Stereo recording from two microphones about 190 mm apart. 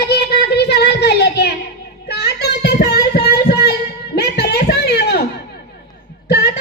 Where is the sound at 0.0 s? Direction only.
60° left (ahead or behind).